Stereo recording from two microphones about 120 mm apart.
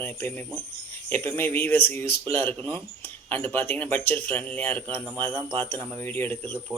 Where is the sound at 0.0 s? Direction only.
15° left (ahead or behind).